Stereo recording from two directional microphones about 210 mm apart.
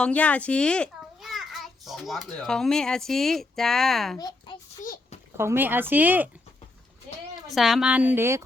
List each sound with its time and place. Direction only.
0.0 s a child's voice: 5° left (ahead or behind)
4.2 s a child's voice: 20° left (ahead or behind)
4.8 s a sound: 40° left (ahead or behind)
5.4 s speech: 10° right (ahead or behind)
7.5 s speech: centre (ahead or behind)